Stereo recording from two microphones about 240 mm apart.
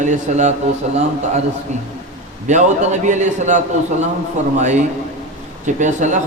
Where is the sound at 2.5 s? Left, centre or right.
Right.